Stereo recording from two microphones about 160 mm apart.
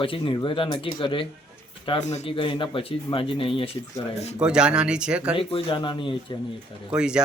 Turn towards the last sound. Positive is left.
turn(degrees=-5)  # may be behind; listen again after turning